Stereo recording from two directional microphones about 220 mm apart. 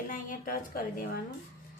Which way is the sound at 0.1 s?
40° left (ahead or behind).